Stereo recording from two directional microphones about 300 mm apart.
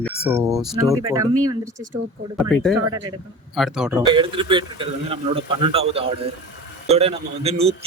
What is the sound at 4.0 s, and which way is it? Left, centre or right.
A man's voice, centre.